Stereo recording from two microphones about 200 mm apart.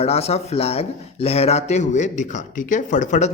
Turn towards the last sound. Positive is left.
turn(degrees=35)  # may be behind; listen again after turning